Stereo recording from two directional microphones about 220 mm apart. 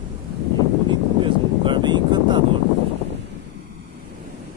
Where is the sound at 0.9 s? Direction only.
20° right (ahead or behind).